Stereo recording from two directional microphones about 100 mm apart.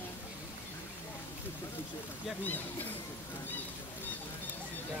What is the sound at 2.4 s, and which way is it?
Speech, 20° left (ahead or behind).